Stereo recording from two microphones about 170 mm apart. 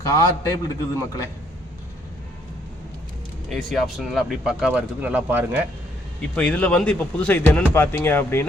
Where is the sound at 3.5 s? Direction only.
Centre (ahead or behind).